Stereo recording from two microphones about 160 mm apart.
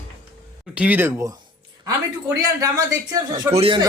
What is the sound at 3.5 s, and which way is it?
Speech, 40° right (ahead or behind).